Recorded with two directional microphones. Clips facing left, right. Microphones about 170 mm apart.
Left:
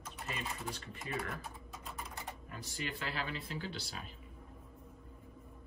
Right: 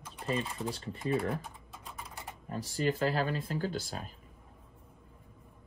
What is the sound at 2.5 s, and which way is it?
Speech, 40° right (ahead or behind).